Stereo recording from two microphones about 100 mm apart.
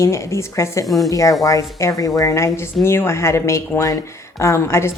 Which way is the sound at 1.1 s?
35° left (ahead or behind).